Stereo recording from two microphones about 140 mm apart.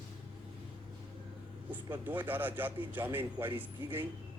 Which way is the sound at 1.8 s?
15° right (ahead or behind).